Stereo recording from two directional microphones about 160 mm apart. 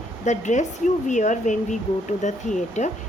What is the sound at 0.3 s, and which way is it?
Speech, 50° left (ahead or behind).